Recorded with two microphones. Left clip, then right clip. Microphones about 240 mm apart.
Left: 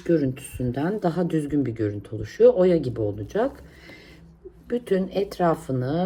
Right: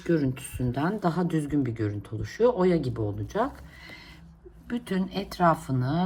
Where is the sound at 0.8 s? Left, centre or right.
Centre.